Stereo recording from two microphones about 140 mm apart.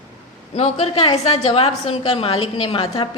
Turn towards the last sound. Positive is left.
turn(degrees=35)  # may be behind; listen again after turning